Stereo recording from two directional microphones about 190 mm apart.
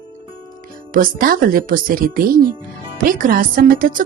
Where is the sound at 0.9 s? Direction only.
45° right (ahead or behind).